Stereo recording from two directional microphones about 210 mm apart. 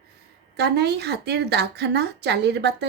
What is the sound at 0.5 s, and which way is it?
A woman's voice, 50° right (ahead or behind).